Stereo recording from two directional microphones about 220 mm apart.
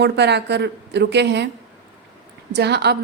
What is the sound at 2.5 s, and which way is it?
Speech, 50° right (ahead or behind).